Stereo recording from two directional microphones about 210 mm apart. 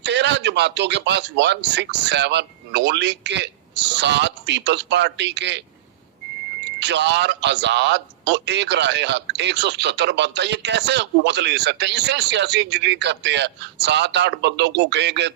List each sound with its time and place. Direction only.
0.0 s a man's voice: 55° right (ahead or behind)
6.7 s a man's voice: 55° right (ahead or behind)